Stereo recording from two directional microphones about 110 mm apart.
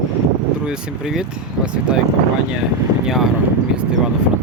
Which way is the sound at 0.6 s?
5° right (ahead or behind).